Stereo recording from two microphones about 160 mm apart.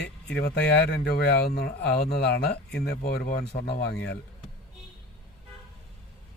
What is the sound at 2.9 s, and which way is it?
Speech, 75° left (ahead or behind).